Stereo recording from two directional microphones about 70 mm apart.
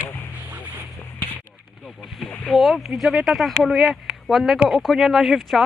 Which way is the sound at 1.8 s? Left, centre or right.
Centre.